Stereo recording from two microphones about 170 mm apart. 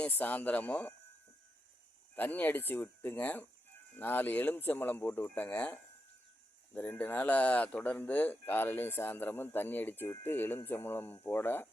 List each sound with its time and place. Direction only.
0.0 s speech: 10° left (ahead or behind)
2.1 s speech: 10° left (ahead or behind)